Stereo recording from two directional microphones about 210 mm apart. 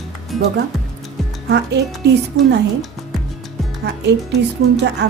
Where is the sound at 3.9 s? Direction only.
50° right (ahead or behind).